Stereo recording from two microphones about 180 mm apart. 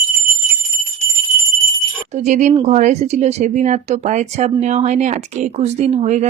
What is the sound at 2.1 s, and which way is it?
Speech, 40° right (ahead or behind).